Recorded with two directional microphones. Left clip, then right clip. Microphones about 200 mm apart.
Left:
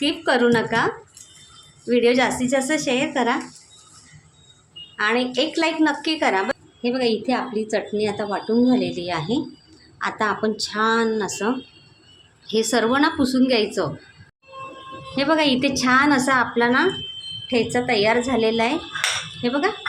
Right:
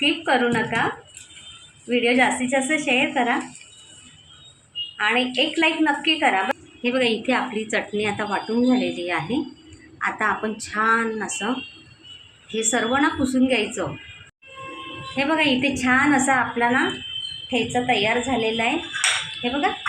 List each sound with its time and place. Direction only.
0.0 s a woman's voice: 40° left (ahead or behind)
1.9 s a woman's voice: 40° left (ahead or behind)
2.5 s a woman's voice: 25° left (ahead or behind)
2.7 s a woman's voice: 40° left (ahead or behind)
4.9 s a woman's voice: 40° left (ahead or behind)
12.5 s a woman's voice: 45° left (ahead or behind)
15.1 s a woman's voice: 45° left (ahead or behind)